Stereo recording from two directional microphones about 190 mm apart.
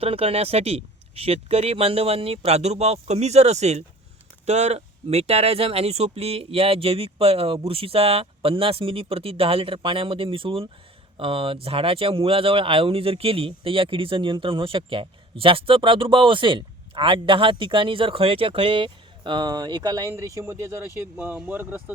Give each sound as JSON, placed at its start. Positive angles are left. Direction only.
{"t": 0.0, "sound": "speech", "side_deg": -30}